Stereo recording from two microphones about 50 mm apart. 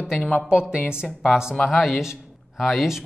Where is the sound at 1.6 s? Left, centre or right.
Centre.